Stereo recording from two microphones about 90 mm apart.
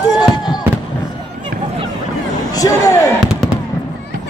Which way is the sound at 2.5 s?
40° left (ahead or behind).